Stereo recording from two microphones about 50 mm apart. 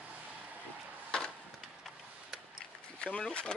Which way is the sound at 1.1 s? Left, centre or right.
Centre.